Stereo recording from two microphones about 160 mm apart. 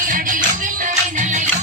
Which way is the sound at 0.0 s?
55° right (ahead or behind).